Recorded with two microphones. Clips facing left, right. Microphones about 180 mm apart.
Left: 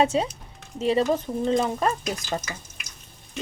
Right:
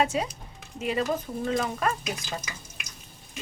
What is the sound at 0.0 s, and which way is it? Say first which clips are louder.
Speech: left 4 dB; 25° left (ahead or behind).